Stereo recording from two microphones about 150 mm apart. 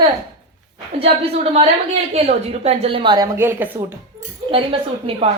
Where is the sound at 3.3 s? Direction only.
15° right (ahead or behind).